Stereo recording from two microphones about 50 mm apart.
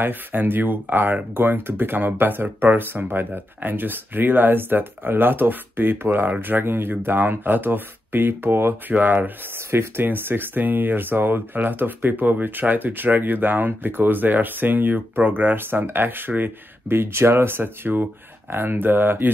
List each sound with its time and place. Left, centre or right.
0.0 s speech: right
8.8 s speech: right
9.6 s speech: right